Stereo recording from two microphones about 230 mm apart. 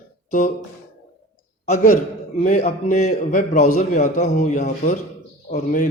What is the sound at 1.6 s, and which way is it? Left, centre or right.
A man's voice, left.